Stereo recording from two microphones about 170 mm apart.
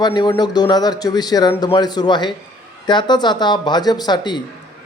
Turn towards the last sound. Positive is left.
turn(degrees=25)  # may be behind; listen again after turning